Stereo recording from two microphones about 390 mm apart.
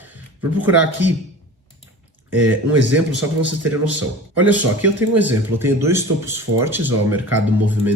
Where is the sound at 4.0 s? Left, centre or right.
Centre.